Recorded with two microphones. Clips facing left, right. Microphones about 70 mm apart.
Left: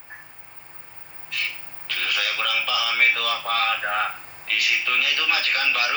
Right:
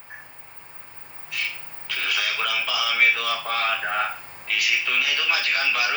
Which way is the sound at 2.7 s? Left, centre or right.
Left.